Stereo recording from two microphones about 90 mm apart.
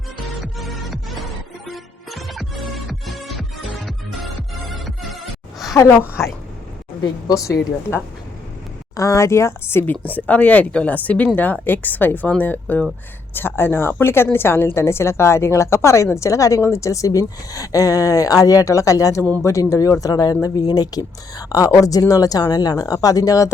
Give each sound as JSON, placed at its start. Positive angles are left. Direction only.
{"t": 0.4, "sound": "music", "side_deg": 0}
{"t": 4.7, "sound": "music", "side_deg": 0}
{"t": 7.0, "sound": "a woman's voice", "side_deg": 40}
{"t": 9.0, "sound": "a woman's voice", "side_deg": 35}